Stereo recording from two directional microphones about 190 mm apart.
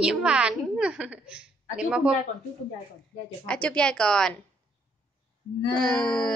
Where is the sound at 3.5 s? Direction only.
5° left (ahead or behind).